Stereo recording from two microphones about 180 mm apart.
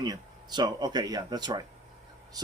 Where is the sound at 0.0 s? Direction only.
25° right (ahead or behind).